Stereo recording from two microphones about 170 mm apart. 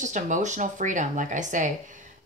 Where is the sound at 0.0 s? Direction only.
45° right (ahead or behind).